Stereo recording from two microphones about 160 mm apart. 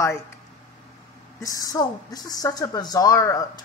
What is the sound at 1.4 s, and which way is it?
A woman's voice, 25° left (ahead or behind).